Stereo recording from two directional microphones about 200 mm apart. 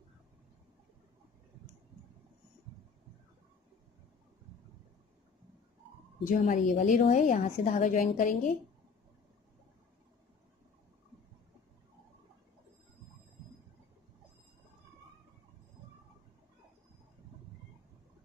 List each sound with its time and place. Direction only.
6.2 s a woman's voice: 40° left (ahead or behind)